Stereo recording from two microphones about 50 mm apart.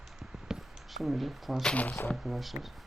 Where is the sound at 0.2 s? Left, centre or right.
Centre.